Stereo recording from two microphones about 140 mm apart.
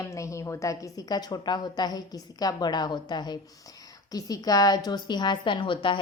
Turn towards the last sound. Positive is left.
turn(degrees=35)  # may be behind; listen again after turning